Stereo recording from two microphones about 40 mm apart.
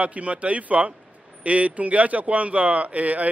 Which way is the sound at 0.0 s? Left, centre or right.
Right.